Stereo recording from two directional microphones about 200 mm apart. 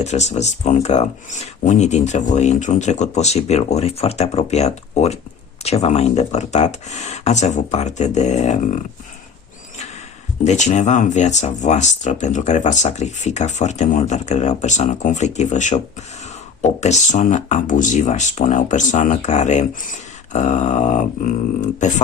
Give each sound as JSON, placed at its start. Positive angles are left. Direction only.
{"t": 0.0, "sound": "speech", "side_deg": 35}
{"t": 10.4, "sound": "speech", "side_deg": 35}